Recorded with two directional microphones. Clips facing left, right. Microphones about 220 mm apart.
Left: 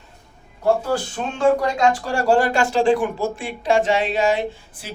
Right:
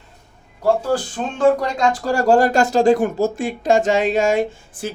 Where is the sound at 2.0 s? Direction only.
40° right (ahead or behind).